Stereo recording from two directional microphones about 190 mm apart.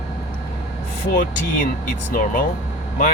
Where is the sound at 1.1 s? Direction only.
45° left (ahead or behind).